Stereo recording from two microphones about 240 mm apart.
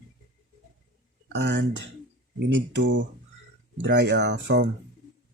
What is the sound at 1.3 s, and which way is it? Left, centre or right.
Speech, right.